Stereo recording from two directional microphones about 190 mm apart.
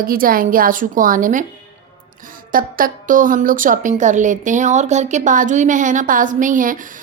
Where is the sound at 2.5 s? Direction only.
45° right (ahead or behind).